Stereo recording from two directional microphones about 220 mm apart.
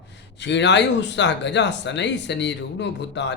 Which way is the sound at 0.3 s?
50° left (ahead or behind).